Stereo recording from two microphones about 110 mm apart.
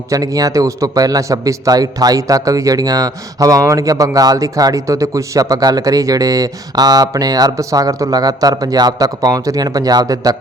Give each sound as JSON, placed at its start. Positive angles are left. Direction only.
{"t": 0.1, "sound": "a man's voice", "side_deg": -30}